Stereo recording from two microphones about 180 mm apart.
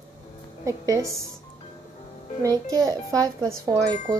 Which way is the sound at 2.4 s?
20° right (ahead or behind).